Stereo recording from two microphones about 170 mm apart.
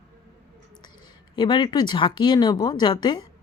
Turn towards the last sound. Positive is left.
turn(degrees=25)  # may be behind; listen again after turning